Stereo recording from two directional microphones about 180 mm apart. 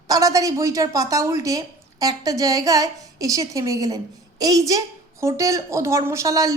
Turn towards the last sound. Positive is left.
turn(degrees=-20)  # may be behind; listen again after turning